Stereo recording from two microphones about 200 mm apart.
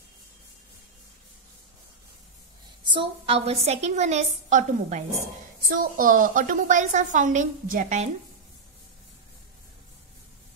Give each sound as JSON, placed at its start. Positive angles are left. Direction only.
{"t": 2.9, "sound": "a woman's voice", "side_deg": -25}